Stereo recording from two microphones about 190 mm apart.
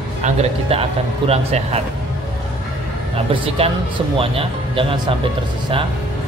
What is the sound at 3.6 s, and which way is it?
Speech, 30° right (ahead or behind).